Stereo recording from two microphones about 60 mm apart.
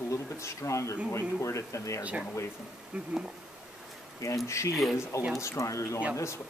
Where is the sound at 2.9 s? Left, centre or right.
Centre.